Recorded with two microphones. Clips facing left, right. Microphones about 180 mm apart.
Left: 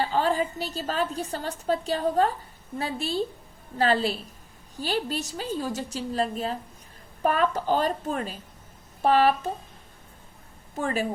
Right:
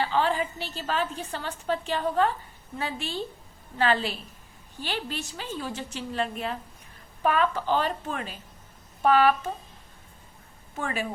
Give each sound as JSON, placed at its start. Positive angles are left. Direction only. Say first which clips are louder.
{"t": 0.0, "sound": "a woman's voice", "louder": "left 1 dB", "side_deg": 40}
{"t": 10.8, "sound": "a woman's voice", "louder": "left 4 dB", "side_deg": 35}